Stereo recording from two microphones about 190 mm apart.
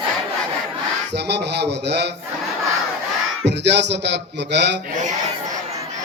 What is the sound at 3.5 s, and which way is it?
A man's voice, 65° right (ahead or behind).